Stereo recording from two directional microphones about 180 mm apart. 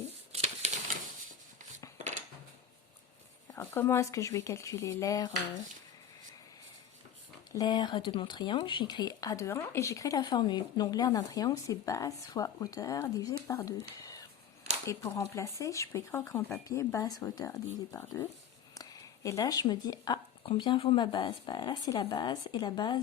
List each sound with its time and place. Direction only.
0.3 s typewriter: 40° right (ahead or behind)
3.5 s speech: 15° left (ahead or behind)
7.5 s speech: 25° left (ahead or behind)
14.0 s a sound: 20° left (ahead or behind)
14.8 s speech: 20° left (ahead or behind)